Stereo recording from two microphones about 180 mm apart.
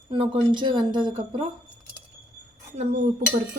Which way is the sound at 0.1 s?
30° right (ahead or behind).